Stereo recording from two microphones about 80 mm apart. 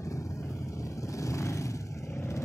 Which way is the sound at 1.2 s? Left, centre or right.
Left.